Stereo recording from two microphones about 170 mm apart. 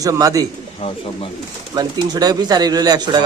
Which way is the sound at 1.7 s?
25° right (ahead or behind).